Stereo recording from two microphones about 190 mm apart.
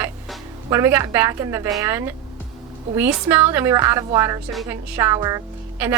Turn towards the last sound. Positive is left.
turn(degrees=-15)  # may be behind; listen again after turning